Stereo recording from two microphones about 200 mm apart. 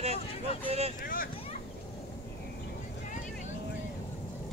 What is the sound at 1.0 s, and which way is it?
Speech, 45° left (ahead or behind).